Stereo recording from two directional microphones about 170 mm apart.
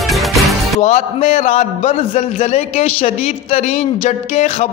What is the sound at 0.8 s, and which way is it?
A man's voice, 40° left (ahead or behind).